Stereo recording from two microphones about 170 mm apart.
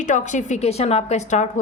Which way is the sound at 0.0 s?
45° left (ahead or behind).